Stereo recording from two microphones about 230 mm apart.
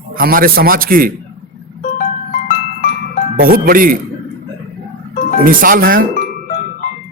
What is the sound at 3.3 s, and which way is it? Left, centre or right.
Speech, right.